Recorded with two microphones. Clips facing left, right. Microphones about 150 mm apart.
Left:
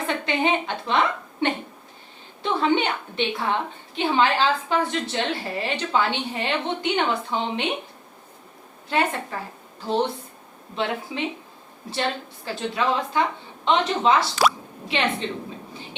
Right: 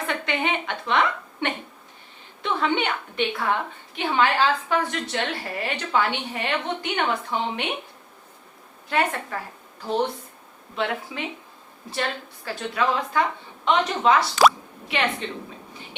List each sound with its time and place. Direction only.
0.1 s a woman's voice: 30° left (ahead or behind)
8.9 s a woman's voice: 25° left (ahead or behind)
10.8 s a woman's voice: 25° left (ahead or behind)
15.7 s a sound: 30° left (ahead or behind)